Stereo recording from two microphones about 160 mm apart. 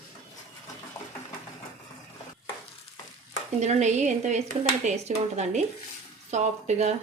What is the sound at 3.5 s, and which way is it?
A woman's voice, 45° right (ahead or behind).